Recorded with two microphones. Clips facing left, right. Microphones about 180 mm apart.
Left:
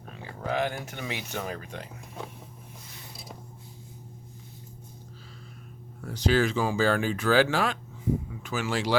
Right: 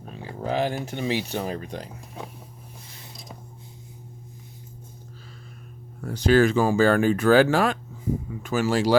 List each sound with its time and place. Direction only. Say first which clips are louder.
0.0 s a sound: right 4 dB; 30° right (ahead or behind)
0.9 s speech: right 9 dB; 30° right (ahead or behind)
6.0 s speech: right 6 dB; 50° right (ahead or behind)